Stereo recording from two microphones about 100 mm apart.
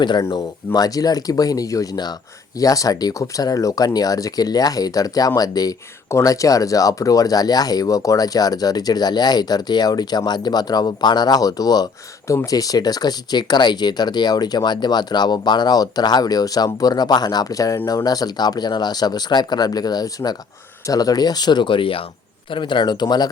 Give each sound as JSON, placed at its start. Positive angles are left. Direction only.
{"t": 0.3, "sound": "speech", "side_deg": 40}